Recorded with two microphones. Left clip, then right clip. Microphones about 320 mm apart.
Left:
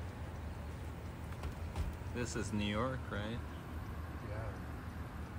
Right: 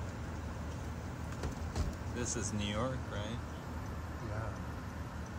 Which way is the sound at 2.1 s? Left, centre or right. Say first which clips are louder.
Right 1 dB; centre.